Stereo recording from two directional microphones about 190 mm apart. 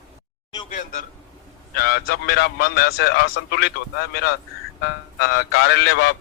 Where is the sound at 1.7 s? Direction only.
55° left (ahead or behind).